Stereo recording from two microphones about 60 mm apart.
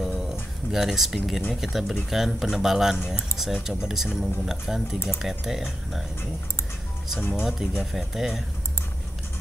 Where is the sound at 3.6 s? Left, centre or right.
Centre.